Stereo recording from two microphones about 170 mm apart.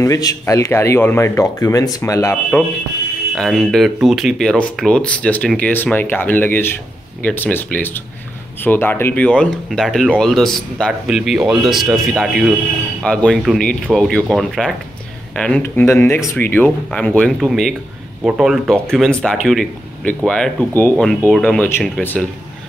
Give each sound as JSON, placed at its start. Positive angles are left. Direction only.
{"t": 0.0, "sound": "speech", "side_deg": 20}
{"t": 3.3, "sound": "speech", "side_deg": 0}